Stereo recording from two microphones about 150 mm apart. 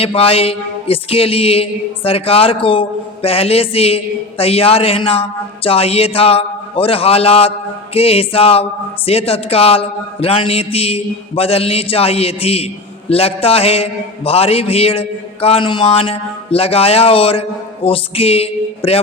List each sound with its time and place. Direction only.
0.0 s a man's voice: 40° left (ahead or behind)